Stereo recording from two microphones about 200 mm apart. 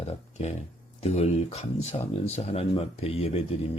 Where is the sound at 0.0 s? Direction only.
35° left (ahead or behind).